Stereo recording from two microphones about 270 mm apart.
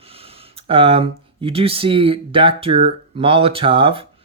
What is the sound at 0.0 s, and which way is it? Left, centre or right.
Speech, right.